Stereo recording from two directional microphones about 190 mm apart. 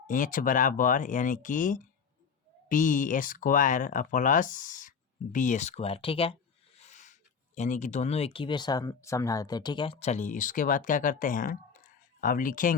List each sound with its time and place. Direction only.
0.1 s speech: 45° left (ahead or behind)